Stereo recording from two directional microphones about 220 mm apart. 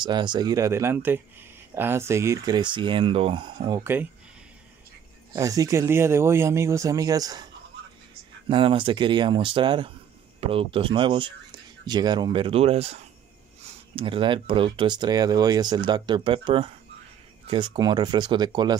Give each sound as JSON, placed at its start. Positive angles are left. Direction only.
{"t": 0.0, "sound": "speech", "side_deg": -20}
{"t": 5.3, "sound": "speech", "side_deg": -15}
{"t": 8.5, "sound": "speech", "side_deg": -25}